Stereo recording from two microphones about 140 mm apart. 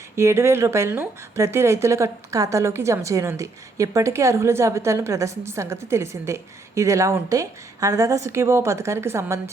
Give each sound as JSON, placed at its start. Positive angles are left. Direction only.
{"t": 0.2, "sound": "speech", "side_deg": -20}